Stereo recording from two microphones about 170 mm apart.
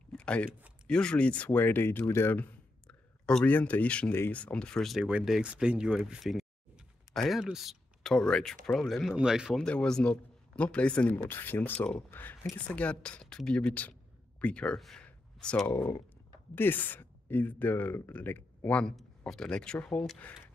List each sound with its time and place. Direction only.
0.1 s a sound: 5° left (ahead or behind)
0.8 s speech: 5° left (ahead or behind)
15.7 s speech: 15° left (ahead or behind)